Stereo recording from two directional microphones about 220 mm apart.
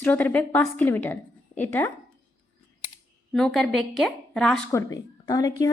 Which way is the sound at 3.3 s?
Centre (ahead or behind).